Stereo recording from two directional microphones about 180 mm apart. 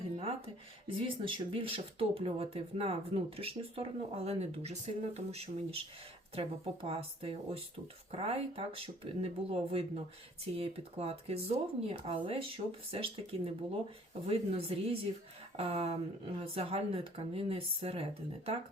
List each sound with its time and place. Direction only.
0.2 s speech: 30° right (ahead or behind)